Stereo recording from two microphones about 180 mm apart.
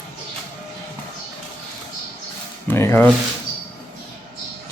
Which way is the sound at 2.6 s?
15° left (ahead or behind).